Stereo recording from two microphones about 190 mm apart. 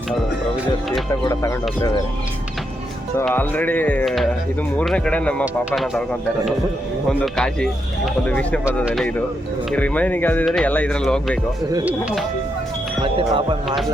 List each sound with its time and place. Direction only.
1.2 s speech: 15° left (ahead or behind)
3.2 s speech: 10° left (ahead or behind)
7.1 s speech: 5° left (ahead or behind)
8.8 s speech: 5° right (ahead or behind)
9.7 s speech: 5° left (ahead or behind)
13.1 s speech: 30° right (ahead or behind)